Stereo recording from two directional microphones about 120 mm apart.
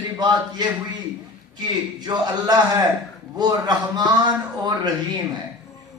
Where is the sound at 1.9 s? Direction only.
35° right (ahead or behind).